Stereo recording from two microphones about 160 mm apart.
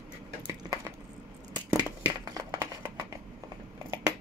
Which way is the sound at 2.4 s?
20° right (ahead or behind).